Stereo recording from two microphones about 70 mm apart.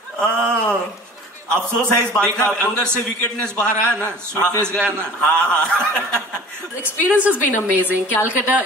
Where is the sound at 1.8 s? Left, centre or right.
Centre.